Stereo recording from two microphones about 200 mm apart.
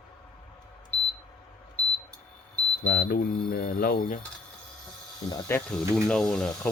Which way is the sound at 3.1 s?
50° left (ahead or behind).